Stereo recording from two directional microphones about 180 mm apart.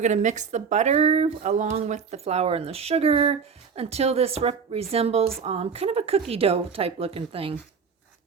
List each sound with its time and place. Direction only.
0.0 s speech: 40° right (ahead or behind)